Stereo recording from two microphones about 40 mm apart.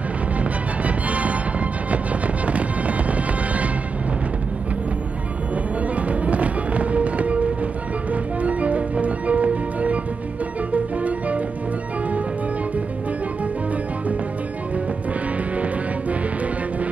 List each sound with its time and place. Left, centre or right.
0.4 s music: right
5.9 s music: right
15.5 s music: right